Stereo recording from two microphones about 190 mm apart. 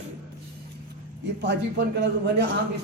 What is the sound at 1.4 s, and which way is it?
A man's voice, 65° right (ahead or behind).